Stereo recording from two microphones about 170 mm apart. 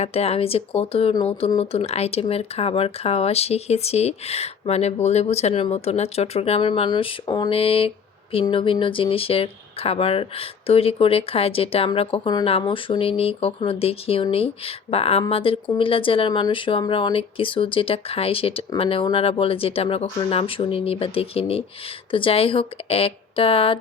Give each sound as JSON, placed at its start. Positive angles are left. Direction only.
{"t": 0.0, "sound": "speech", "side_deg": 35}